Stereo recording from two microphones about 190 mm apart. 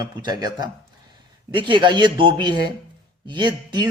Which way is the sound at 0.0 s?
20° right (ahead or behind).